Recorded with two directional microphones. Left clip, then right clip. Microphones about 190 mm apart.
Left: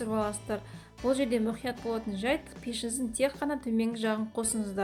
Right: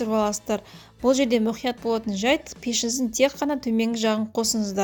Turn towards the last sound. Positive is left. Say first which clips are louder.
# right 8 dB
turn(degrees=-40)  # may be behind; listen again after turning